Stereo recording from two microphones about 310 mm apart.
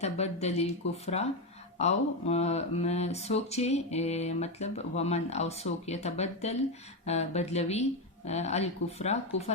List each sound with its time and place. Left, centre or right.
0.0 s speech: left